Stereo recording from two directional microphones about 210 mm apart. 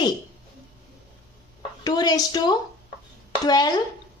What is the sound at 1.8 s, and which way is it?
A woman's voice, 20° left (ahead or behind).